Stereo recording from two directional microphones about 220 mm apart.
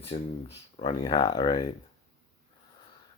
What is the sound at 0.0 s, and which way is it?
Speech, 25° left (ahead or behind).